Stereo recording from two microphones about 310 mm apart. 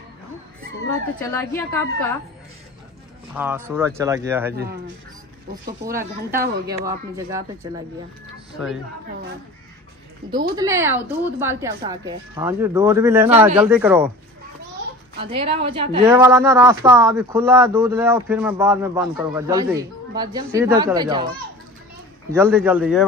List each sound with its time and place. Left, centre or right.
1.3 s a woman's voice: centre
3.3 s a woman's voice: centre
5.7 s speech: right
6.8 s a woman's voice: centre
10.5 s a woman's voice: centre
15.1 s a woman's voice: centre
22.3 s a woman's voice: centre